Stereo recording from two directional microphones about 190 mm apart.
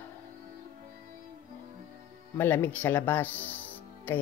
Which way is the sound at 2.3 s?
10° left (ahead or behind).